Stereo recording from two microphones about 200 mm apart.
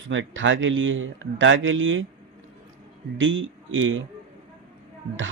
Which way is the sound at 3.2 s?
70° right (ahead or behind).